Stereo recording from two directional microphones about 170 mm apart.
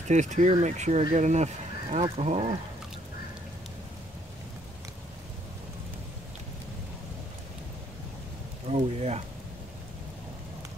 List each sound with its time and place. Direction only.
0.1 s speech: 45° right (ahead or behind)
8.6 s speech: 40° right (ahead or behind)